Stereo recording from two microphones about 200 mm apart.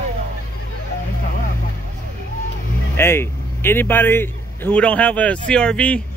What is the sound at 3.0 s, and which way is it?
A man's voice, 10° left (ahead or behind).